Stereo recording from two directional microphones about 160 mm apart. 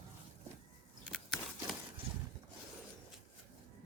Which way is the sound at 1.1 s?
Centre (ahead or behind).